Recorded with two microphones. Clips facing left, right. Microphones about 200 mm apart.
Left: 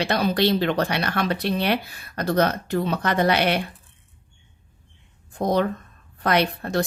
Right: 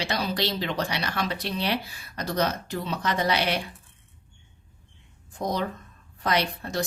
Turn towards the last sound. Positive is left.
turn(degrees=60)  # may be behind; listen again after turning